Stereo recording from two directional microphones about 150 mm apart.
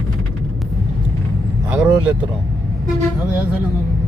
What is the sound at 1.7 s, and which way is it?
Speech, 10° right (ahead or behind).